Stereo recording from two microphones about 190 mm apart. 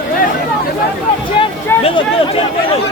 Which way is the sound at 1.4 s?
25° left (ahead or behind).